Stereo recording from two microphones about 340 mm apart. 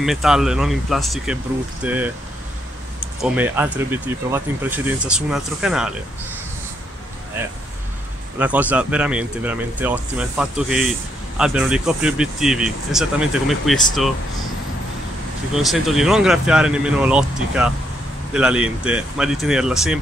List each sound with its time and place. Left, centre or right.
0.0 s speech: centre
3.2 s speech: centre
7.4 s speech: centre
15.5 s speech: centre